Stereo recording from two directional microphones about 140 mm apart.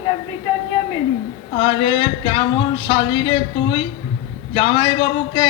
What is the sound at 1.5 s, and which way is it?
A man's voice, 35° left (ahead or behind).